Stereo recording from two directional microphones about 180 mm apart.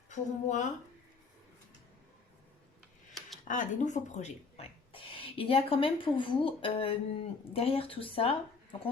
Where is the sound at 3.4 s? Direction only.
45° left (ahead or behind).